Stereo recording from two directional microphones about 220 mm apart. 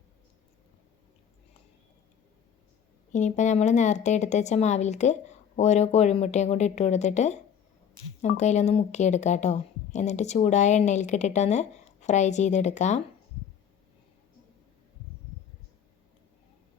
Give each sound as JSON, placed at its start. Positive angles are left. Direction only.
{"t": 3.1, "sound": "speech", "side_deg": 35}
{"t": 8.4, "sound": "speech", "side_deg": 30}